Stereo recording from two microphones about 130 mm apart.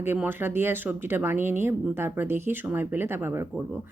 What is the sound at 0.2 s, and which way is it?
Speech, 15° right (ahead or behind).